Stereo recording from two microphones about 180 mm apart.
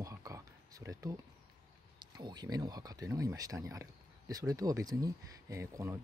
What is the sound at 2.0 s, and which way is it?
Speech, 25° right (ahead or behind).